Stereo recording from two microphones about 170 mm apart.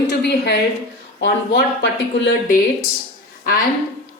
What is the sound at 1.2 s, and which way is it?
A woman's voice, 90° left.